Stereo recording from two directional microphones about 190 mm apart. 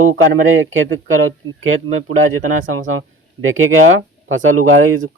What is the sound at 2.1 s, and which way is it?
Speech, 40° right (ahead or behind).